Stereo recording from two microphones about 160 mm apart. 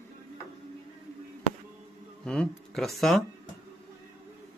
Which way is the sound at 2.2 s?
5° left (ahead or behind).